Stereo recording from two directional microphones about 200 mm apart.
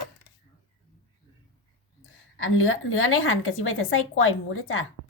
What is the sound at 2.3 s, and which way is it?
A woman's voice, 85° left.